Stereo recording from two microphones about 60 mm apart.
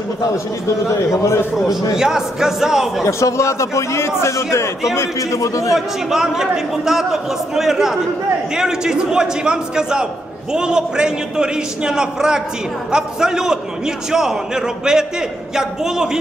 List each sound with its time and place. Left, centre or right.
0.8 s a man's voice: left
1.7 s a man's voice: centre
3.1 s a man's voice: left
5.8 s a man's voice: centre